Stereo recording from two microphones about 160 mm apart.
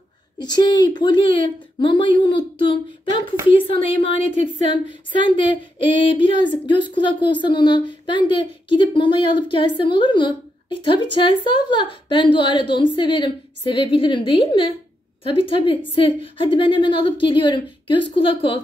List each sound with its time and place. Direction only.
0.4 s a woman's voice: 25° left (ahead or behind)